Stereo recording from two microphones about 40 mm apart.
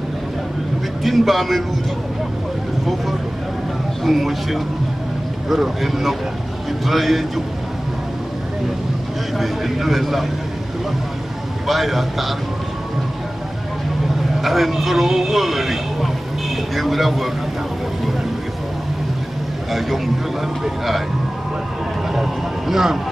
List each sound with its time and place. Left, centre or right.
1.0 s speech: centre
4.0 s speech: centre
9.4 s speech: centre
11.6 s speech: centre
14.4 s speech: centre
22.1 s speech: centre